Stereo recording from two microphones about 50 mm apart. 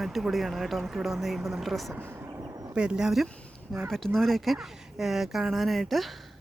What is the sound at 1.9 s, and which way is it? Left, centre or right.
Speech, right.